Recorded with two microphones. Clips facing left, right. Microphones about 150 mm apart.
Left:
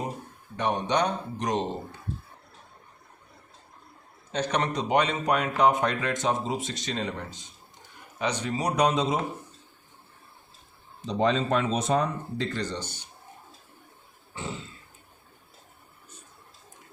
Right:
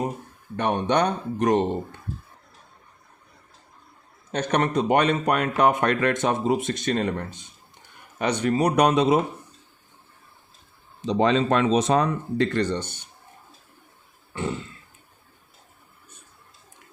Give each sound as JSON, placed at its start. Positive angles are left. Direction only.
{"t": 0.5, "sound": "speech", "side_deg": -60}
{"t": 4.3, "sound": "speech", "side_deg": -55}
{"t": 11.0, "sound": "speech", "side_deg": -90}